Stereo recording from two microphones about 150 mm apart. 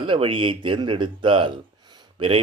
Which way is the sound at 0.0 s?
35° right (ahead or behind).